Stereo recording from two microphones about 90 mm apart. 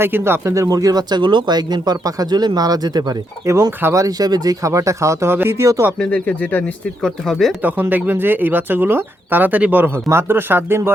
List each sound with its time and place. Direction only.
0.0 s speech: 25° right (ahead or behind); by 3.2 s 50° right (ahead or behind)
3.4 s speech: 30° right (ahead or behind)
3.9 s speech: 40° right (ahead or behind)
6.0 s speech: 15° left (ahead or behind)
7.0 s speech: 5° left (ahead or behind)
7.6 s speech: 20° right (ahead or behind)